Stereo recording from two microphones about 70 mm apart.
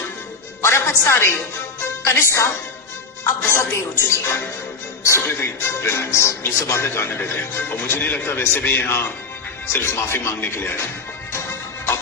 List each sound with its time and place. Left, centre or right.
0.6 s speech: left